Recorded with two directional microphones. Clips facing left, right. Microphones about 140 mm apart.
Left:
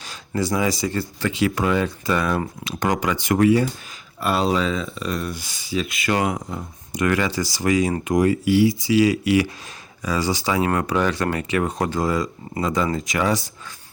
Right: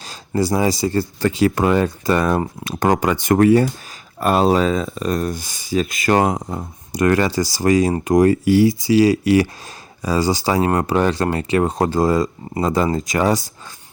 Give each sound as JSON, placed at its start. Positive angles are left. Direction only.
{"t": 0.0, "sound": "speech", "side_deg": -35}